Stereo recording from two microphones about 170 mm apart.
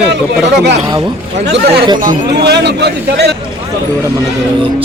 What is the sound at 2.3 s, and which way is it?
A man's voice, 75° right (ahead or behind).